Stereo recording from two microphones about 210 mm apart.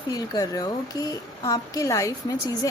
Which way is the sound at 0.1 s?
15° left (ahead or behind).